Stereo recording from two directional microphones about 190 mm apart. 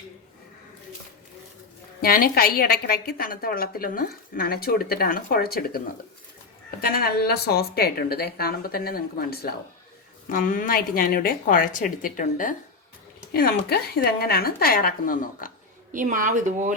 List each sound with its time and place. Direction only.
2.0 s a woman's voice: 50° left (ahead or behind)
6.8 s a woman's voice: 55° left (ahead or behind)
15.9 s speech: 45° right (ahead or behind)